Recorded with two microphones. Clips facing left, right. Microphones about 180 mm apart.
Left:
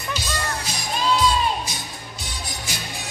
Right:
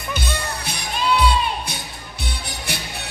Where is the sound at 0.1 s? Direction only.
60° right (ahead or behind).